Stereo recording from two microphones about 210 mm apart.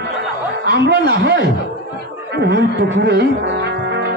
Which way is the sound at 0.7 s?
55° right (ahead or behind).